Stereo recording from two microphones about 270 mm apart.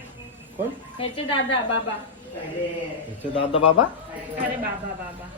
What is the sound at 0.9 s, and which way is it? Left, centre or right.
Speech, centre.